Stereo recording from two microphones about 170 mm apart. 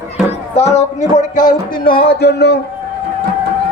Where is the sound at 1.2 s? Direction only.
50° left (ahead or behind); by 2.5 s 75° left (ahead or behind).